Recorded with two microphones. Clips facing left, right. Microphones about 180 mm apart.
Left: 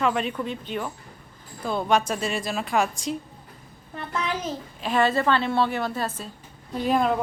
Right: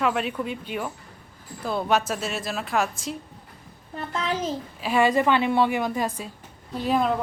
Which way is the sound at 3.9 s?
30° right (ahead or behind).